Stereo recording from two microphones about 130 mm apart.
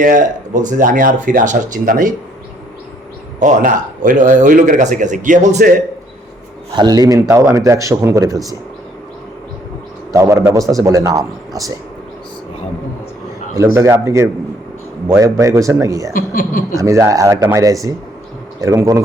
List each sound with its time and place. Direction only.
0.0 s speech: 80° right
3.4 s speech: 85° right
6.7 s a man's voice: 30° right (ahead or behind)
10.1 s a man's voice: 25° right (ahead or behind)
13.6 s a man's voice: 20° right (ahead or behind)
16.1 s speech: 90° left
16.7 s a man's voice: 25° right (ahead or behind)